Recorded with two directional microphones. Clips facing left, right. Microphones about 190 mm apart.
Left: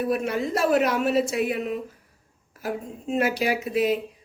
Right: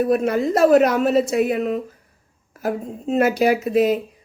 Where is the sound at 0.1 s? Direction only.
40° right (ahead or behind).